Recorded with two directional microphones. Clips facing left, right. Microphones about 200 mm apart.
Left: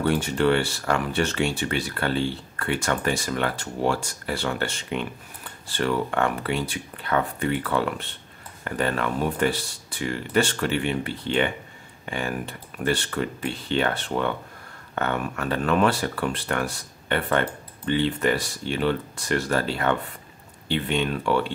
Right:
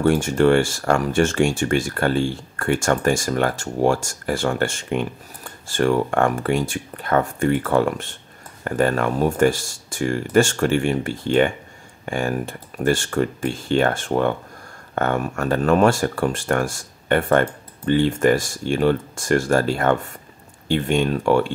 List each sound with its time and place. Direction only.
0.0 s speech: 45° right (ahead or behind)